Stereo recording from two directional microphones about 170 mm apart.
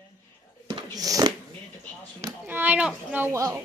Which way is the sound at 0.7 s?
25° right (ahead or behind).